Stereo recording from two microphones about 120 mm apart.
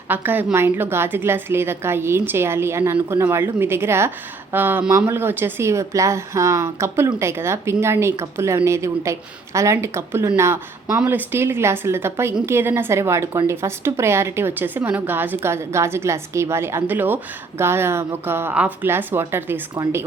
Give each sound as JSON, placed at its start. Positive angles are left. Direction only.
{"t": 0.1, "sound": "a woman's voice", "side_deg": -15}